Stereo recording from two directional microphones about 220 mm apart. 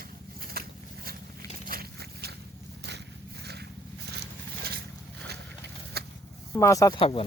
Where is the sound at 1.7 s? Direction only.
45° right (ahead or behind).